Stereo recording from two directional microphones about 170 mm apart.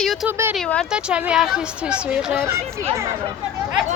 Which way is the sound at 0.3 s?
15° right (ahead or behind).